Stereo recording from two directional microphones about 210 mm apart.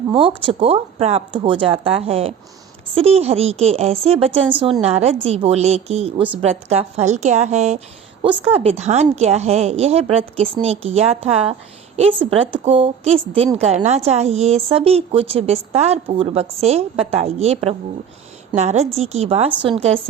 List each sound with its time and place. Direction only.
0.1 s a woman's voice: 25° right (ahead or behind)